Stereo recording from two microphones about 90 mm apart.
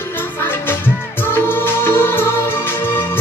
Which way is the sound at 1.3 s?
25° left (ahead or behind).